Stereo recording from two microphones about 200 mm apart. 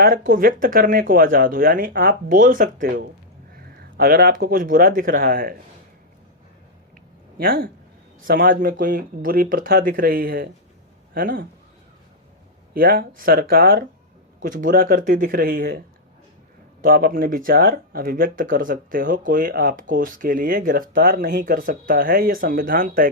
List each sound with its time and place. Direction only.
0.3 s speech: 45° right (ahead or behind)
7.3 s speech: 45° right (ahead or behind)
12.7 s speech: 50° right (ahead or behind)
16.8 s speech: 45° right (ahead or behind)